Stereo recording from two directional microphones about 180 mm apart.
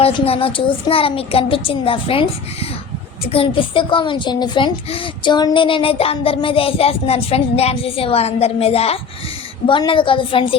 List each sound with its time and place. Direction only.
0.0 s a child's voice: 30° left (ahead or behind)